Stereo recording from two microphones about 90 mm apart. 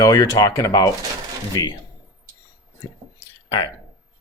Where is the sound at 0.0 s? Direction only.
40° left (ahead or behind).